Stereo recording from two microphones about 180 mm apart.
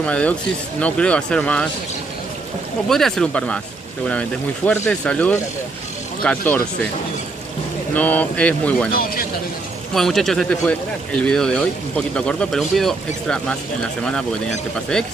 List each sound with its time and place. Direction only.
0.0 s speech: 5° left (ahead or behind)
2.9 s speech: centre (ahead or behind)
7.9 s speech: 10° left (ahead or behind)
8.9 s a man's voice: 55° left (ahead or behind)
9.9 s speech: centre (ahead or behind)